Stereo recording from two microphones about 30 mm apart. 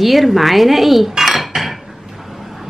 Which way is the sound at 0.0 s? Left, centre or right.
Centre.